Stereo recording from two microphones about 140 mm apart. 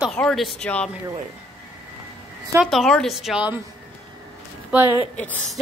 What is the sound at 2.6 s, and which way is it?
Speech, centre (ahead or behind).